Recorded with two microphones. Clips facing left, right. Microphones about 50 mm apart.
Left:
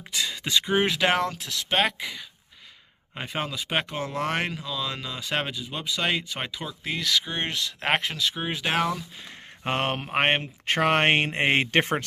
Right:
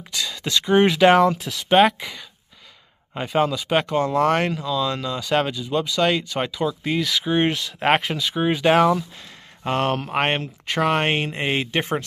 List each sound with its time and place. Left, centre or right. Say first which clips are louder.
0.1 s a sound: right 2 dB; centre
0.7 s speech: right 10 dB; centre
7.2 s speech: right 9 dB; centre
9.7 s speech: right 5 dB; left
10.7 s speech: right 1 dB; left